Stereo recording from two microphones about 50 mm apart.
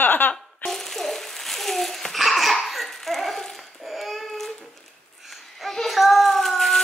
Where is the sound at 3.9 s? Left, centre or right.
Centre.